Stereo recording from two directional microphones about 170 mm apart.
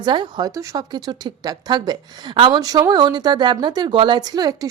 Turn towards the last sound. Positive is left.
turn(degrees=-20)  # may be behind; listen again after turning